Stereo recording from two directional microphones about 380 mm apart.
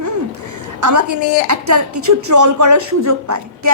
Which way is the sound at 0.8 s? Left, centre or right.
Right.